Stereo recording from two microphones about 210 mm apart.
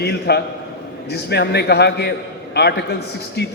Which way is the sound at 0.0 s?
50° left (ahead or behind).